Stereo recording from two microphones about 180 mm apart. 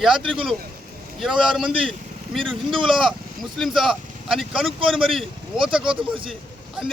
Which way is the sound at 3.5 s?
Centre (ahead or behind).